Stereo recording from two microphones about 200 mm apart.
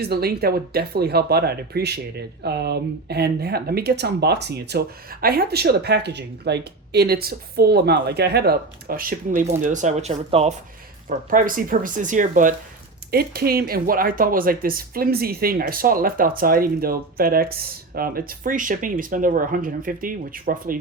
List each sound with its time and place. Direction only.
0.0 s speech: 50° right (ahead or behind); by 10.5 s 30° right (ahead or behind)
11.3 s speech: 45° right (ahead or behind)